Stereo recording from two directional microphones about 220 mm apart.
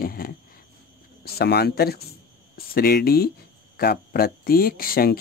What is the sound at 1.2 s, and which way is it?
Speech, 45° left (ahead or behind).